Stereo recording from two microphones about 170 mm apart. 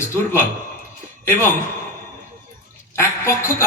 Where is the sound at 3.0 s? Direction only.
15° left (ahead or behind).